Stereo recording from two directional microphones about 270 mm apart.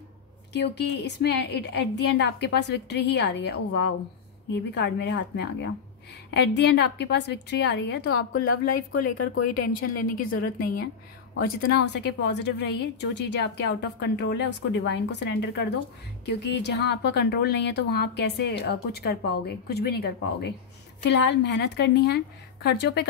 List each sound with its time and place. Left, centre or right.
0.5 s a woman's voice: left